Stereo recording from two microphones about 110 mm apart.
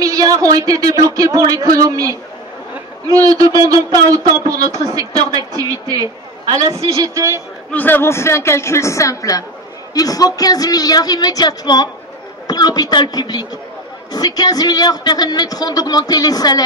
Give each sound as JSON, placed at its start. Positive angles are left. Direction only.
{"t": 0.0, "sound": "a man's voice", "side_deg": -35}
{"t": 7.0, "sound": "speech", "side_deg": -25}
{"t": 7.7, "sound": "a woman's voice", "side_deg": 15}